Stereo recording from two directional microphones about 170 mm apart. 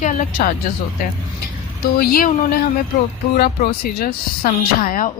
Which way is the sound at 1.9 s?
60° left (ahead or behind).